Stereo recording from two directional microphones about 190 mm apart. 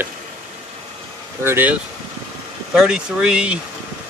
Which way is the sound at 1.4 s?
10° right (ahead or behind).